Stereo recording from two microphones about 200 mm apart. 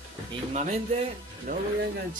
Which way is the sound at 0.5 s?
35° right (ahead or behind).